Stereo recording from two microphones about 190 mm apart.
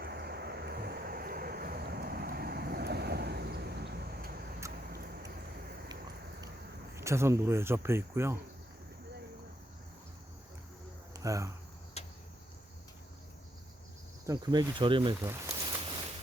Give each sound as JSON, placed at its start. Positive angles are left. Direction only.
{"t": 0.0, "sound": "vehicle", "side_deg": -55}
{"t": 6.9, "sound": "speech", "side_deg": -15}
{"t": 11.1, "sound": "cricket", "side_deg": -15}
{"t": 12.0, "sound": "a sound", "side_deg": 35}
{"t": 14.3, "sound": "speech", "side_deg": -20}
{"t": 15.1, "sound": "speech", "side_deg": -15}